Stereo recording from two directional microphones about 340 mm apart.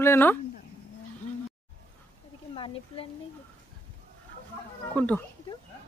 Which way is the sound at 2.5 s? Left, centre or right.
Centre.